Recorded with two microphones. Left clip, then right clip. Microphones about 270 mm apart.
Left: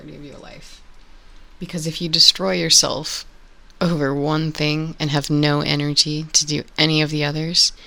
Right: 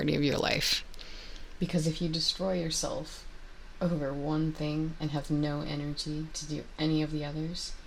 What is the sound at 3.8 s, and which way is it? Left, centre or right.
Speech, left.